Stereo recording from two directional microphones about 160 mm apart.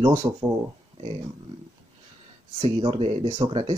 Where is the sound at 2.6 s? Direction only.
35° right (ahead or behind).